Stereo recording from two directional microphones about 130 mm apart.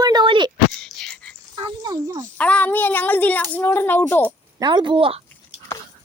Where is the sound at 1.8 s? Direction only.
25° right (ahead or behind).